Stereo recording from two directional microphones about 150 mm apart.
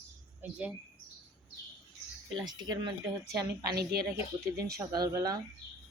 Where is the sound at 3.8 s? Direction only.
90° right.